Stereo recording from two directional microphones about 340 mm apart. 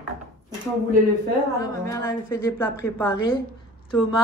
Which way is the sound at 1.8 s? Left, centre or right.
Centre.